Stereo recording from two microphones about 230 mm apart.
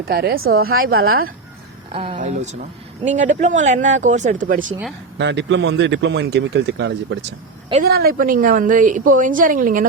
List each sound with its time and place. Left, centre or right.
0.1 s a woman's voice: right
1.9 s a woman's voice: right
5.1 s a woman's voice: right